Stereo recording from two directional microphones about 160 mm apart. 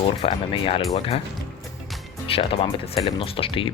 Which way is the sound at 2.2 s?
35° left (ahead or behind).